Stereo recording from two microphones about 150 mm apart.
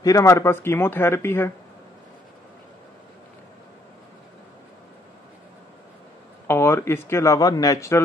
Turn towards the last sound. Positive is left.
turn(degrees=20)  # may be behind; listen again after turning